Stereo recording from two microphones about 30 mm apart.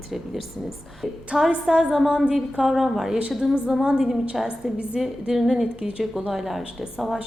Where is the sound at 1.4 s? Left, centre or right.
Centre.